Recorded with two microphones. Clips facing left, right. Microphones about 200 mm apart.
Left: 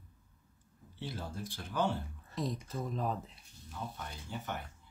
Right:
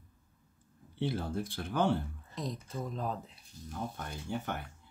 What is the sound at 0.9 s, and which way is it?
Speech, 55° right (ahead or behind).